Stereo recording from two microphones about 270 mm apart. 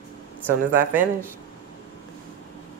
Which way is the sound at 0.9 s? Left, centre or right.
Centre.